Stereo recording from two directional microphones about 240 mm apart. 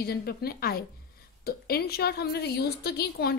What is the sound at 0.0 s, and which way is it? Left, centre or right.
A woman's voice, left.